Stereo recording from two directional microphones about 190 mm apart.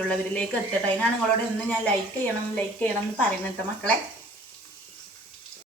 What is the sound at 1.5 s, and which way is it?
A woman's voice, 10° left (ahead or behind).